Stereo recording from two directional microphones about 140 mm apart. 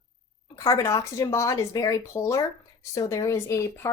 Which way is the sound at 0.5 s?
25° left (ahead or behind).